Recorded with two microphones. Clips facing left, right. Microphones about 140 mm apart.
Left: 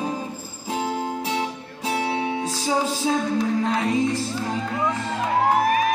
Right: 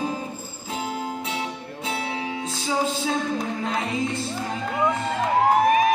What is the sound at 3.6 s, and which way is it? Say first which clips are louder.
Music: left 4 dB; centre (ahead or behind).